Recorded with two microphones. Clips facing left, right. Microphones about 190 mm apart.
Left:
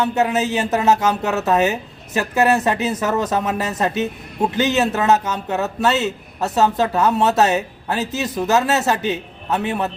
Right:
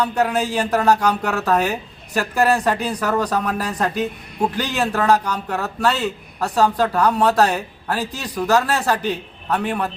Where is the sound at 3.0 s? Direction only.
20° left (ahead or behind).